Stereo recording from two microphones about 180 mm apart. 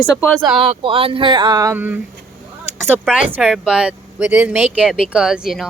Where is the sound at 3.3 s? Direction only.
5° right (ahead or behind).